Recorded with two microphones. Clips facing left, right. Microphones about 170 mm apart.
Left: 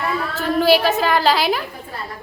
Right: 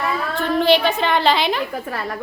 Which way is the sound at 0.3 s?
5° left (ahead or behind).